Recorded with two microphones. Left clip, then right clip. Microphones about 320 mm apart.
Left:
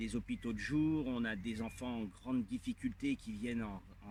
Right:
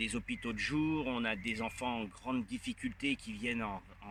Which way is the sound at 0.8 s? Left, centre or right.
Right.